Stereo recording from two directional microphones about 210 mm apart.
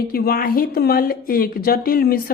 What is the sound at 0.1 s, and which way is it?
Speech, 45° left (ahead or behind).